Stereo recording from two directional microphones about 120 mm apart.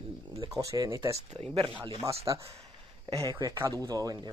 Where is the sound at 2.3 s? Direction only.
35° right (ahead or behind).